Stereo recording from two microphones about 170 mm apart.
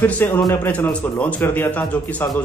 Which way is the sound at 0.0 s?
10° left (ahead or behind).